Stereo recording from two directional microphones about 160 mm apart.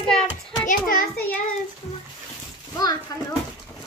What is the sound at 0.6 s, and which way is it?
Speech, 60° left (ahead or behind).